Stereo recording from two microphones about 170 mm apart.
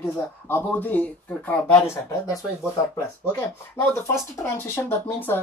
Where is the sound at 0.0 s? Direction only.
15° left (ahead or behind).